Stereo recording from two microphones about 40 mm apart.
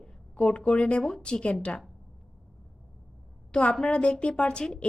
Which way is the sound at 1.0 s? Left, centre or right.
Left.